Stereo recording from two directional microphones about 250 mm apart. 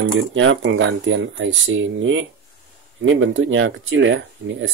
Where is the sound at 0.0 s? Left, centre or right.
Right.